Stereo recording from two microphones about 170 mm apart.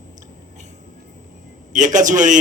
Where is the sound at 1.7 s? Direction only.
50° right (ahead or behind).